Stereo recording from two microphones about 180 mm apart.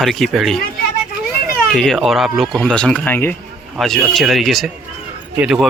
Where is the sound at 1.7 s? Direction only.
Centre (ahead or behind).